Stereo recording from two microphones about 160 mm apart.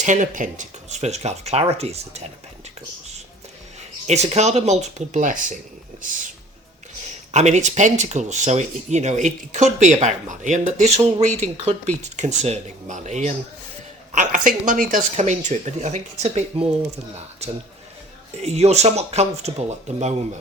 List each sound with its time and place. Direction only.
0.0 s speech: 50° right (ahead or behind)
4.0 s speech: 45° right (ahead or behind)
7.3 s speech: 45° right (ahead or behind)
18.4 s speech: 40° right (ahead or behind)